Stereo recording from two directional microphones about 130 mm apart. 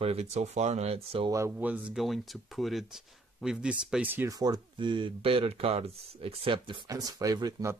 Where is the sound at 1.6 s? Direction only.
10° right (ahead or behind).